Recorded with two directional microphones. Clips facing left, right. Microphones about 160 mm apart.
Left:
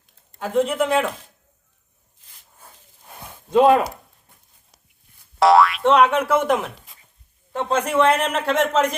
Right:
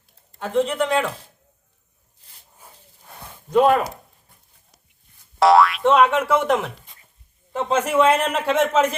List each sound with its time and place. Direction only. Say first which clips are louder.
0.3 s speech: left 1 dB; 5° left (ahead or behind)
3.1 s a sound: left 1 dB; 10° left (ahead or behind)
3.5 s speech: left 2 dB; 20° left (ahead or behind)
5.4 s a man's voice: even; centre (ahead or behind)